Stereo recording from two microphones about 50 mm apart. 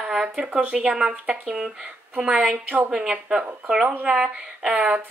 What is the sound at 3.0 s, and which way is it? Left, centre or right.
Speech, centre.